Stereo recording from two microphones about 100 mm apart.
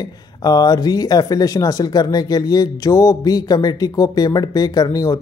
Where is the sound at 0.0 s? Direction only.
40° left (ahead or behind).